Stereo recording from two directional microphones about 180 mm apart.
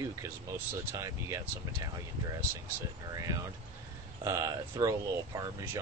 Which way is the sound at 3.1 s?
20° right (ahead or behind).